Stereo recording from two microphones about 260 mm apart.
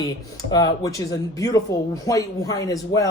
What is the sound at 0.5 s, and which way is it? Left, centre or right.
Speech, centre.